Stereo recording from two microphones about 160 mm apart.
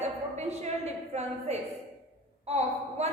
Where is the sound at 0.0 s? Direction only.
45° right (ahead or behind).